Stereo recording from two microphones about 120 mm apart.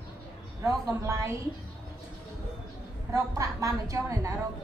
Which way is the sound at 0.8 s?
30° right (ahead or behind).